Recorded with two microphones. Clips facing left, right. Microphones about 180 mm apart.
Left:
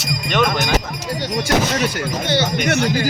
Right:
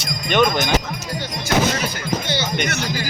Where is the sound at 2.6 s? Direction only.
60° left (ahead or behind).